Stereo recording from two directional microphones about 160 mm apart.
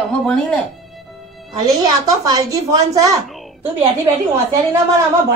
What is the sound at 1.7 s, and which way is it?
A woman's voice, 20° right (ahead or behind).